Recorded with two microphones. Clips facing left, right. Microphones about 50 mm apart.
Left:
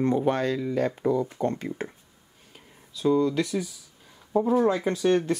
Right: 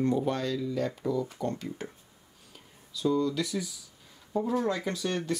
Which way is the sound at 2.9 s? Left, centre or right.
Left.